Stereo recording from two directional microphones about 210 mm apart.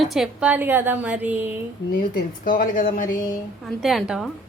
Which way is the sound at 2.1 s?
40° left (ahead or behind).